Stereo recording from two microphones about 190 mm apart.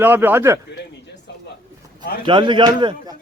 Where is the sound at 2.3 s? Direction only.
25° right (ahead or behind).